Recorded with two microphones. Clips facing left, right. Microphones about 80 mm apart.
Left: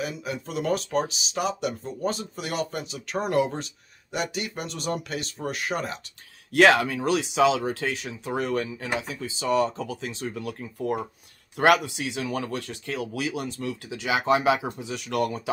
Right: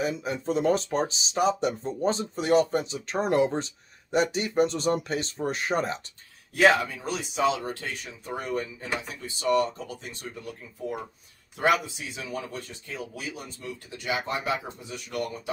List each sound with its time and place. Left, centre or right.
0.0 s speech: right
6.5 s speech: left
10.0 s speech: left
11.5 s speech: left